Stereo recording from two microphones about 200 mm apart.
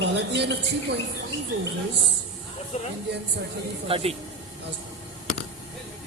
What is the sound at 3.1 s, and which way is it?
Speech, 55° right (ahead or behind).